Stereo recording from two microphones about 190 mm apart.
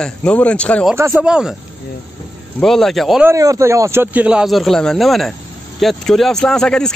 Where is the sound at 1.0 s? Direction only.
10° right (ahead or behind).